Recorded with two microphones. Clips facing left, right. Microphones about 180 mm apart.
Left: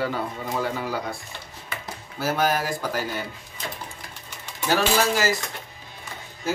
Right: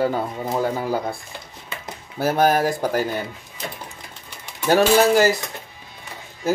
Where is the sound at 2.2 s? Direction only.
55° right (ahead or behind).